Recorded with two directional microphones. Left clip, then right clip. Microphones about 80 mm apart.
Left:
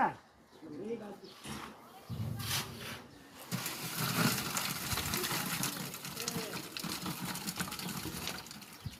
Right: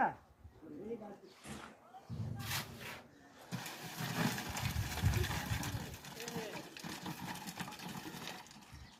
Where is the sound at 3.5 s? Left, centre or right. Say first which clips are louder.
Left 6 dB; left.